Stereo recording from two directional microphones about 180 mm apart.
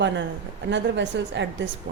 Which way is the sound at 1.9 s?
60° right (ahead or behind).